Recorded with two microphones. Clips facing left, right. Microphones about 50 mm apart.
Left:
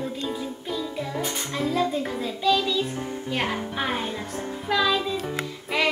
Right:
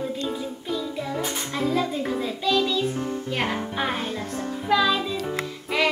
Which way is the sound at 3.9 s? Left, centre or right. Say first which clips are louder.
Even; left.